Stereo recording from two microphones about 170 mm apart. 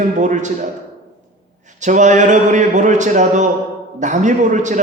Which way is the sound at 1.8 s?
45° right (ahead or behind).